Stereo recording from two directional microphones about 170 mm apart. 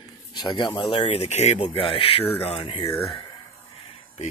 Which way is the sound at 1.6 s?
30° left (ahead or behind).